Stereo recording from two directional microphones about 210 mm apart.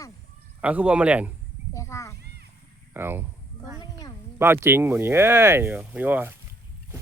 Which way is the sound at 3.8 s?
15° left (ahead or behind).